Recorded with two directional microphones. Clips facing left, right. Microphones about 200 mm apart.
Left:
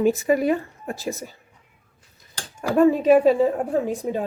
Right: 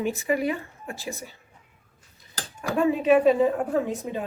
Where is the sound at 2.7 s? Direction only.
40° left (ahead or behind).